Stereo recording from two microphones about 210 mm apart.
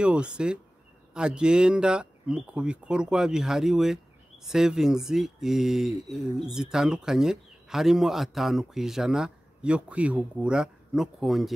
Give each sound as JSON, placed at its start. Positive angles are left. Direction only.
{"t": 0.0, "sound": "speech", "side_deg": -5}